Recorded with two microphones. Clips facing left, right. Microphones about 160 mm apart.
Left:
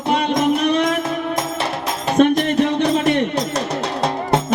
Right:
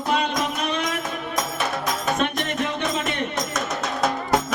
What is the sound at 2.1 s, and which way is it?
Music, 30° left (ahead or behind).